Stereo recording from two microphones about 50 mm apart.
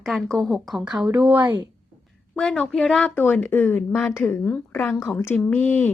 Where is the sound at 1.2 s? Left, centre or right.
Right.